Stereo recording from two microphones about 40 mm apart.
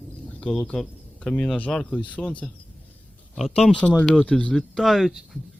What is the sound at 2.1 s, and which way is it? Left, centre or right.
Speech, left.